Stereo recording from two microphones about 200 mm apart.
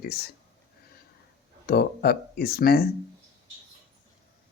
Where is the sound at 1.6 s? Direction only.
50° left (ahead or behind).